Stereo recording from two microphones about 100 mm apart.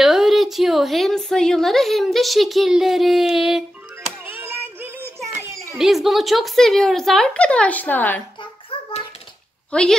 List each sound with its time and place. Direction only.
0.0 s a woman's voice: 5° right (ahead or behind)
4.3 s music: 20° right (ahead or behind)
5.2 s children playing: 30° right (ahead or behind)
5.8 s a woman's voice: 5° right (ahead or behind); by 8.2 s 15° left (ahead or behind)
9.7 s speech: 10° left (ahead or behind)